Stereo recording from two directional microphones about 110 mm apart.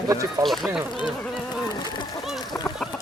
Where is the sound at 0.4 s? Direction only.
Centre (ahead or behind).